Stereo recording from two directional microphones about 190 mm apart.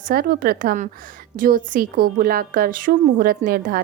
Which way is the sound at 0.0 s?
50° right (ahead or behind).